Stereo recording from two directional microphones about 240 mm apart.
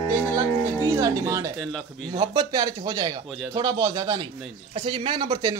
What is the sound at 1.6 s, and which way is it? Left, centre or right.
Speech, centre.